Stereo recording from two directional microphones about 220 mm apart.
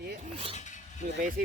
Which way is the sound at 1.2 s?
40° right (ahead or behind).